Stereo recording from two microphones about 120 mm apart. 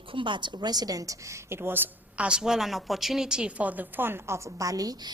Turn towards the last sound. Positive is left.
turn(degrees=-30)  # may be behind; listen again after turning